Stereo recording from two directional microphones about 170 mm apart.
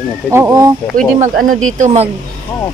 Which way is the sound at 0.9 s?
55° right (ahead or behind).